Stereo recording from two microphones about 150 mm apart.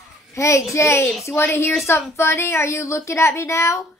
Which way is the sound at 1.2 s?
20° left (ahead or behind).